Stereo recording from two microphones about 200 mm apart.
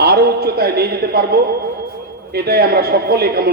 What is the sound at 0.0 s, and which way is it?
A man's voice, 55° right (ahead or behind).